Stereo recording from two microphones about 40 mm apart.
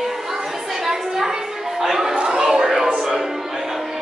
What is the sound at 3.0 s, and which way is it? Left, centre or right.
Music, centre.